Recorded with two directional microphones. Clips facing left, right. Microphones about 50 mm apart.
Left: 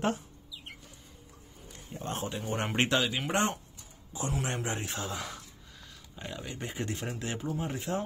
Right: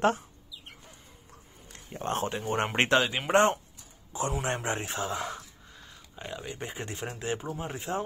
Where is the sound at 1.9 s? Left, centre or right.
Right.